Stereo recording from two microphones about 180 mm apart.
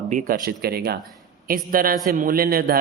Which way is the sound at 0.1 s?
50° right (ahead or behind).